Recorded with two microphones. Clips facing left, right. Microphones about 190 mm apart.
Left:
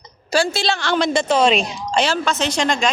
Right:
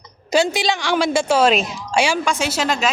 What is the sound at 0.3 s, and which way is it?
A woman's voice, 20° right (ahead or behind).